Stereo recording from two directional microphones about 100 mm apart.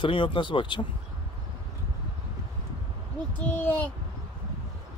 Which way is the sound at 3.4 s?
15° left (ahead or behind).